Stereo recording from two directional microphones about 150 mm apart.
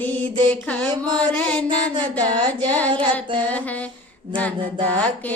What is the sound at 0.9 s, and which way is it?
Mantra, 30° right (ahead or behind).